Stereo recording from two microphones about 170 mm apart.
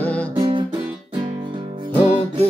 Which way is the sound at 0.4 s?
30° right (ahead or behind).